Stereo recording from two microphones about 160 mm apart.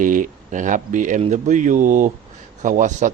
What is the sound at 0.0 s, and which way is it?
A man's voice, 55° right (ahead or behind).